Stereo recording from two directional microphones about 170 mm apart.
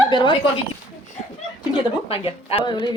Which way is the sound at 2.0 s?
35° left (ahead or behind).